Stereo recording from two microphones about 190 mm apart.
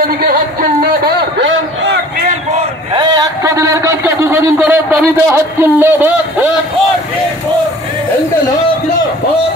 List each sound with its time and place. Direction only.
0.2 s speech: 50° right (ahead or behind)
2.9 s a man's voice: 20° right (ahead or behind)